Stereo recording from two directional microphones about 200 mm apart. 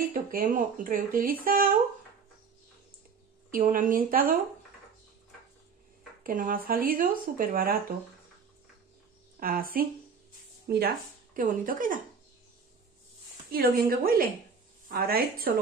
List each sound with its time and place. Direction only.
0.1 s speech: 45° right (ahead or behind)
3.5 s speech: 40° right (ahead or behind)
6.2 s speech: 45° right (ahead or behind)
9.4 s speech: 45° right (ahead or behind)
13.5 s speech: 45° right (ahead or behind)